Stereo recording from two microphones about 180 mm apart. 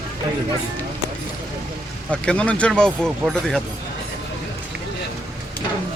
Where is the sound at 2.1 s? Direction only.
5° left (ahead or behind).